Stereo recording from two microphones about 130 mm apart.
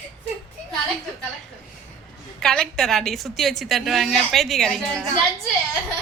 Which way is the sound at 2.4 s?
5° left (ahead or behind).